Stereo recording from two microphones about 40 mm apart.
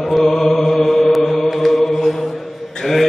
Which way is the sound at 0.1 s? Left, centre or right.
Centre.